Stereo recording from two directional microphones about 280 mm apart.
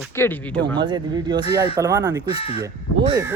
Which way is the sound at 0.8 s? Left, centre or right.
Centre.